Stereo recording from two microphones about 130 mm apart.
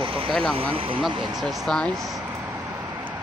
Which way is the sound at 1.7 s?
5° left (ahead or behind).